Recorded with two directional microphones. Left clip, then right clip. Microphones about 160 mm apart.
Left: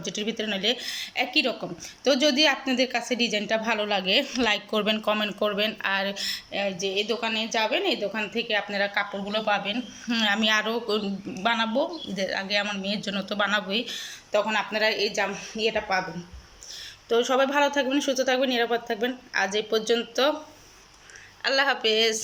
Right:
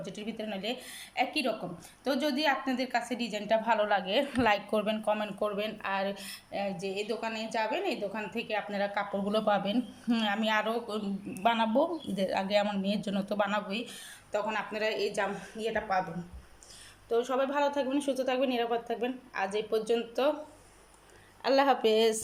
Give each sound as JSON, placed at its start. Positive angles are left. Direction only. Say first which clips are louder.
{"t": 0.0, "sound": "a woman's voice", "louder": "left 9 dB", "side_deg": -5}
{"t": 9.3, "sound": "speech", "louder": "left 3 dB", "side_deg": -30}
{"t": 10.2, "sound": "a woman's voice", "louder": "left 6 dB", "side_deg": -5}
{"t": 11.4, "sound": "speech", "louder": "left 2 dB", "side_deg": -10}
{"t": 13.7, "sound": "a woman's voice", "louder": "left 9 dB", "side_deg": 0}
{"t": 15.5, "sound": "speech", "louder": "left 7 dB", "side_deg": 10}
{"t": 17.1, "sound": "a woman's voice", "louder": "left 7 dB", "side_deg": 5}
{"t": 21.4, "sound": "speech", "louder": "left 2 dB", "side_deg": -25}